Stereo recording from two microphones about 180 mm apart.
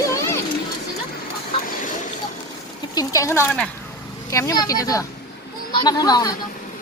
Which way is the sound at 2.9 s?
20° left (ahead or behind).